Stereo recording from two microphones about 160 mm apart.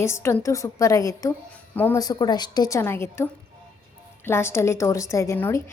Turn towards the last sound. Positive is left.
turn(degrees=15)  # may be behind; listen again after turning